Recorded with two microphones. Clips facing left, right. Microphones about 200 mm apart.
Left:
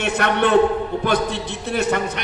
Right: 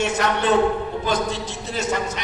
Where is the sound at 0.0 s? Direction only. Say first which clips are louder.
Left 2 dB; 60° left (ahead or behind).